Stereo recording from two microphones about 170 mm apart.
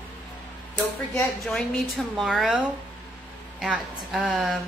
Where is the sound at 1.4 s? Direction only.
Centre (ahead or behind).